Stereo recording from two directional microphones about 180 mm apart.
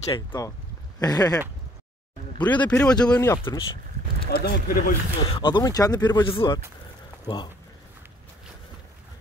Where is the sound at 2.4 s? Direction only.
10° left (ahead or behind).